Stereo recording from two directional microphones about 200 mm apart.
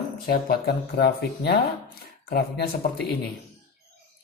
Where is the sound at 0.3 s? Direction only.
50° left (ahead or behind).